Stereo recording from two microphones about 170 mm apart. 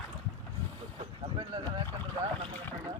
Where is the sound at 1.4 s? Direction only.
25° right (ahead or behind).